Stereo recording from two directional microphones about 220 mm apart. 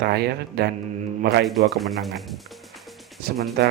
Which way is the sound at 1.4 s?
Centre (ahead or behind).